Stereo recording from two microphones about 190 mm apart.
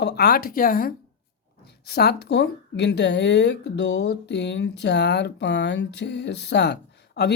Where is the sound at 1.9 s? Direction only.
60° left (ahead or behind).